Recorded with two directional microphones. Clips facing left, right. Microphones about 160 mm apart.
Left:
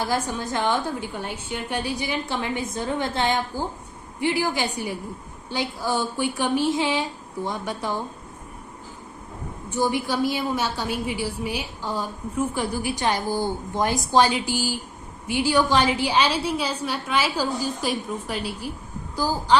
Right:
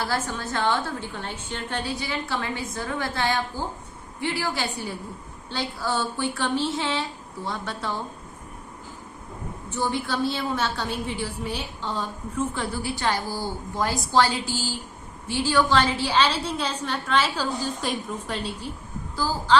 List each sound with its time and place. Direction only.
0.0 s a woman's voice: 15° left (ahead or behind)
9.6 s a woman's voice: 15° left (ahead or behind)